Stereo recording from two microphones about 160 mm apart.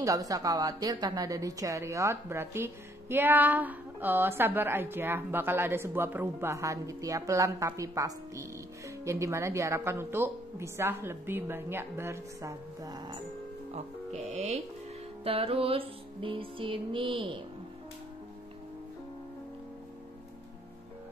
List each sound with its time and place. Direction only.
0.0 s a woman's voice: 20° right (ahead or behind)
13.7 s speech: 45° right (ahead or behind)
15.2 s music: 35° right (ahead or behind)